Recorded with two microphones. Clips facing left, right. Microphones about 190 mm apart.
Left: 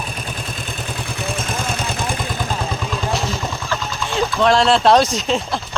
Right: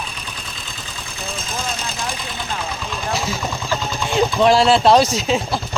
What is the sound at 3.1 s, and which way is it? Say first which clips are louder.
Vehicle: left 1 dB; 5° right (ahead or behind).